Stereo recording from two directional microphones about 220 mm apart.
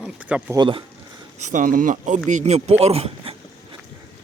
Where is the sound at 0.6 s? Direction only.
25° right (ahead or behind).